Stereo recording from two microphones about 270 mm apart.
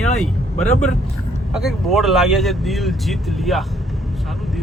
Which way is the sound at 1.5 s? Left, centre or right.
Centre.